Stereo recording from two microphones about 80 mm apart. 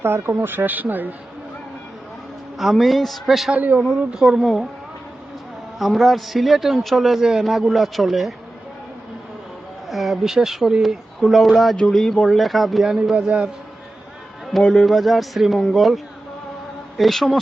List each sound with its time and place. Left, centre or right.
0.0 s speech: right
2.6 s a man's voice: centre
3.5 s speech: centre
3.8 s speech: centre
5.8 s a man's voice: centre
9.9 s a man's voice: centre
11.8 s a man's voice: centre
14.6 s a man's voice: centre
17.0 s a man's voice: centre